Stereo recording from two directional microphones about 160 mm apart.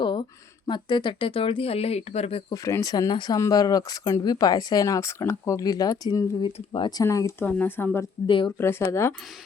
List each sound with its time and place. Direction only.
0.0 s a sound: 30° left (ahead or behind)
0.7 s speech: 30° left (ahead or behind)
2.5 s speech: 20° left (ahead or behind)
7.0 s speech: 20° left (ahead or behind)
8.3 s speech: 30° left (ahead or behind)
8.5 s speech: 15° left (ahead or behind)